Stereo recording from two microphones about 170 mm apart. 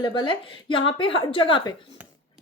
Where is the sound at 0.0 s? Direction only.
25° left (ahead or behind).